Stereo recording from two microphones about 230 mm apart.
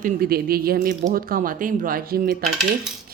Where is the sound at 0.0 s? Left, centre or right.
Right.